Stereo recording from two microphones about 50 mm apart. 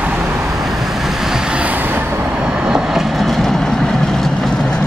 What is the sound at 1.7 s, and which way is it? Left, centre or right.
Vehicle, right.